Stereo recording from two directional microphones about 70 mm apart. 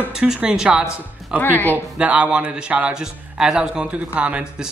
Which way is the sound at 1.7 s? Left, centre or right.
Right.